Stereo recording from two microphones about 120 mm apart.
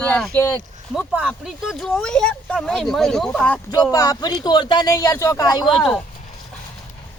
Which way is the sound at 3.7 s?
30° left (ahead or behind).